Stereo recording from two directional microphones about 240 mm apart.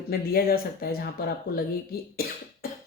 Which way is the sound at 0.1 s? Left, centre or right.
Left.